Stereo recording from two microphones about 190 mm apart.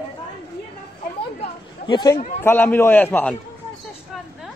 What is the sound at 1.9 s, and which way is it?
Speech, 20° left (ahead or behind).